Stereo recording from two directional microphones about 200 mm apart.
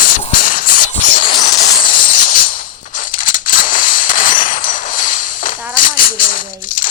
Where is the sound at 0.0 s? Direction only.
40° left (ahead or behind).